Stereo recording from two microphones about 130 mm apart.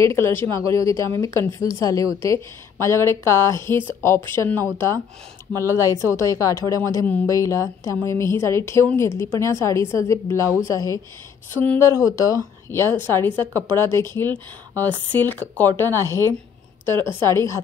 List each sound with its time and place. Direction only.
0.0 s a woman's voice: 20° left (ahead or behind)
11.5 s speech: 10° left (ahead or behind)
11.8 s a woman's voice: 25° left (ahead or behind)
17.2 s a woman's voice: 30° right (ahead or behind)